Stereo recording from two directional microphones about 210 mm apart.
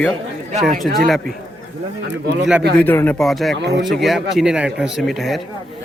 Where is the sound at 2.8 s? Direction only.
10° left (ahead or behind).